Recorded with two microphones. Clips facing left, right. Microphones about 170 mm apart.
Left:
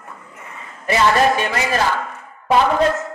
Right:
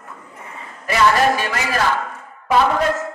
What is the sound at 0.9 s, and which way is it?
Speech, 25° left (ahead or behind).